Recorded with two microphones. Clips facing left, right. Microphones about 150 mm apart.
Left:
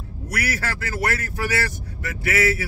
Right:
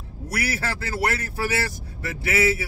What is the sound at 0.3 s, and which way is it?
A man's voice, 25° right (ahead or behind).